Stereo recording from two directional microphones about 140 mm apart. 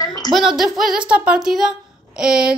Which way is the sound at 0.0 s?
25° left (ahead or behind).